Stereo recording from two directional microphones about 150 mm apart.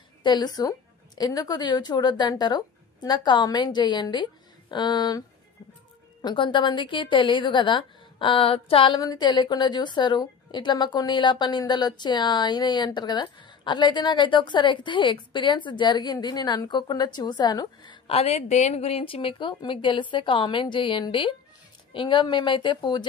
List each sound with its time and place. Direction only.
0.2 s a woman's voice: 30° left (ahead or behind)
6.2 s a woman's voice: 35° left (ahead or behind)
18.0 s a woman's voice: 40° left (ahead or behind)